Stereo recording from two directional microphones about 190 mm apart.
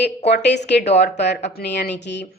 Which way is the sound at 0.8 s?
35° left (ahead or behind).